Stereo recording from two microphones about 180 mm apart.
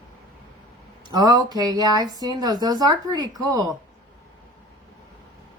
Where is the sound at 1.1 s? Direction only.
20° right (ahead or behind).